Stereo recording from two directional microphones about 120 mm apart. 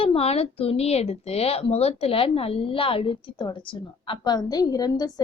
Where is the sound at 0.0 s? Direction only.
55° left (ahead or behind).